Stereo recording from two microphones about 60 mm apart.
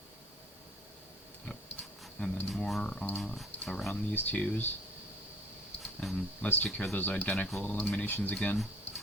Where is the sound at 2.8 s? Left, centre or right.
Centre.